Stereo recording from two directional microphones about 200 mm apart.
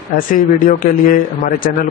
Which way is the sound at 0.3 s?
40° left (ahead or behind).